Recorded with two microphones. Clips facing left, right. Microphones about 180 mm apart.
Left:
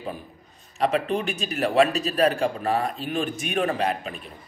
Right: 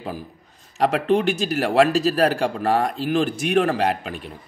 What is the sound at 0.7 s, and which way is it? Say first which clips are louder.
A man's voice: right 4 dB; 75° right (ahead or behind).